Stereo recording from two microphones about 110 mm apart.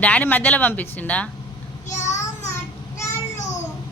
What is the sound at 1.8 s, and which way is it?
Child singing, 90° left.